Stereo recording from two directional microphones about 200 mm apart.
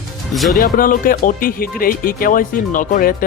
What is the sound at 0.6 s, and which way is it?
Speech, 45° left (ahead or behind).